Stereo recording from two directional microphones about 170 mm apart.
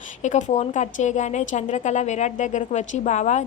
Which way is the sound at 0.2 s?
45° left (ahead or behind).